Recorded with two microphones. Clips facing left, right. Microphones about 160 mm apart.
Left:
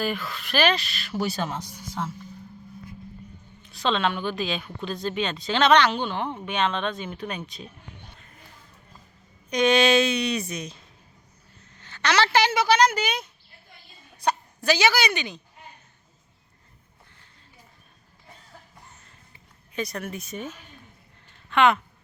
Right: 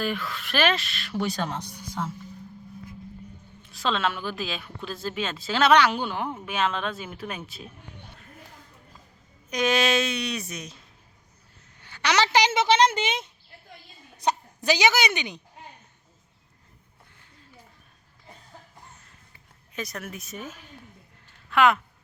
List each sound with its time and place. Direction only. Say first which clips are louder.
0.0 s speech: left 1 dB; centre (ahead or behind)
3.7 s speech: left 2 dB; centre (ahead or behind)
9.5 s speech: left 4 dB; 5° right (ahead or behind)
11.8 s a woman's voice: left 1 dB; 10° right (ahead or behind)
19.7 s speech: left 4 dB; centre (ahead or behind)
21.5 s speech: left 1 dB; centre (ahead or behind)